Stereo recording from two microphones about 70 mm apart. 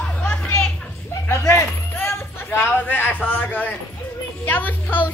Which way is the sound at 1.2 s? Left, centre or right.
Left.